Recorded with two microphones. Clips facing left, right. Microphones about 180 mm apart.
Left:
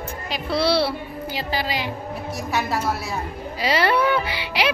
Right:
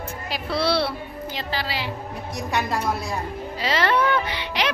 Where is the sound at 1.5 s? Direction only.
15° left (ahead or behind).